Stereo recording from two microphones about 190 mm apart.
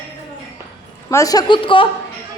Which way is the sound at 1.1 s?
15° left (ahead or behind).